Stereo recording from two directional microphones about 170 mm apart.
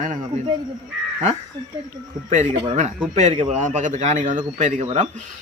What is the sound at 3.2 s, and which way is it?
Speech, 30° right (ahead or behind).